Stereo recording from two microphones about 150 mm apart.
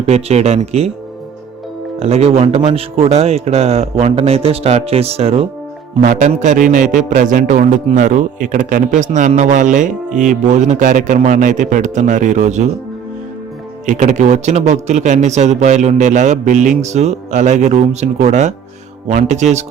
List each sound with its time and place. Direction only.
0.0 s speech: 45° right (ahead or behind)
2.0 s speech: 45° right (ahead or behind)
6.0 s a man's voice: 50° right (ahead or behind)
13.8 s speech: 55° right (ahead or behind)